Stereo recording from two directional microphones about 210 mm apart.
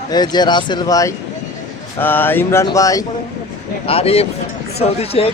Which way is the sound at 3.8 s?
30° left (ahead or behind).